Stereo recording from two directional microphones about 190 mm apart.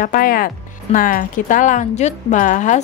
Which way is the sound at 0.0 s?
45° left (ahead or behind).